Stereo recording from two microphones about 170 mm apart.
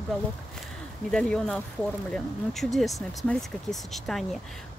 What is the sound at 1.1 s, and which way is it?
Speech, 5° left (ahead or behind).